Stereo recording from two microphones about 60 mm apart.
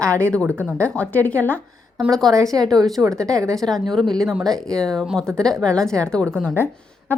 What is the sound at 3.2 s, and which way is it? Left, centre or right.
Speech, right.